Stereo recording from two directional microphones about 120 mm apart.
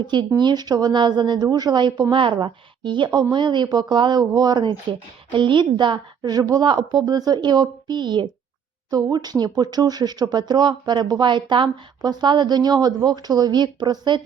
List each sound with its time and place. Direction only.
0.0 s a woman's voice: 40° right (ahead or behind)